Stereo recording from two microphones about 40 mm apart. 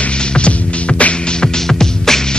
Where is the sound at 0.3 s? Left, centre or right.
Left.